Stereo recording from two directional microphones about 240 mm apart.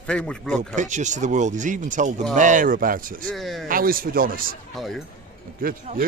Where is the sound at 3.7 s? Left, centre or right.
Right.